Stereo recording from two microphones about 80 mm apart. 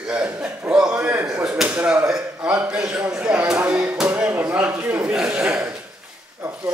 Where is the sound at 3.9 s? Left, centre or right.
Centre.